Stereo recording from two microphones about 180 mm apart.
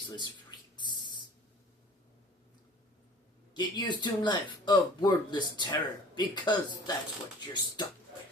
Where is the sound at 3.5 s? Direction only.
25° left (ahead or behind).